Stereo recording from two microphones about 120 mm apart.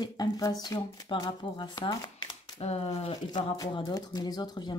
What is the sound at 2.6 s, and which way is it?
Speech, 55° left (ahead or behind).